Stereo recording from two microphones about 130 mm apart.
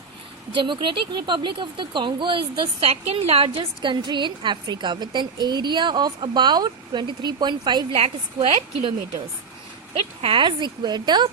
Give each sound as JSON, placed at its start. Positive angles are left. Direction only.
{"t": 0.5, "sound": "speech", "side_deg": -40}
{"t": 7.9, "sound": "a woman's voice", "side_deg": -50}
{"t": 9.9, "sound": "speech", "side_deg": -50}